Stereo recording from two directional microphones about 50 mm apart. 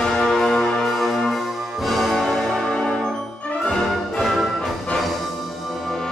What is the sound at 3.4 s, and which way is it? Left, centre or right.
Music, left.